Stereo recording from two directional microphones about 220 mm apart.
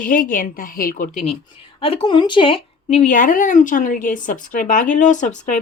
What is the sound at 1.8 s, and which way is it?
Speech, 25° left (ahead or behind).